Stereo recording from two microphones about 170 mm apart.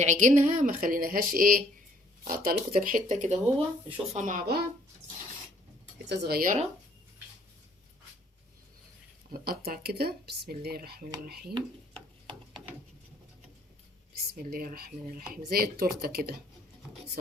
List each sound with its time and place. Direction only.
0.0 s speech: 45° right (ahead or behind)
6.1 s speech: 65° right (ahead or behind)
9.3 s speech: 60° right (ahead or behind)
14.3 s speech: 60° right (ahead or behind)